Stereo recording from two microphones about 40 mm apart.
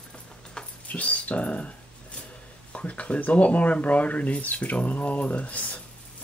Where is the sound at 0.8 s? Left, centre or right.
Left.